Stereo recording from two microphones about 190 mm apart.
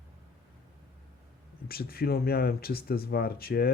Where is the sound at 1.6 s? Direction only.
55° left (ahead or behind).